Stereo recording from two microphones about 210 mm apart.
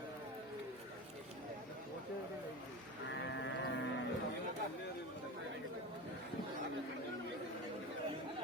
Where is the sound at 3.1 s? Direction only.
55° left (ahead or behind).